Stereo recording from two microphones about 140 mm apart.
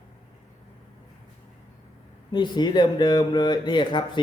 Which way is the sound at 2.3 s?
30° left (ahead or behind).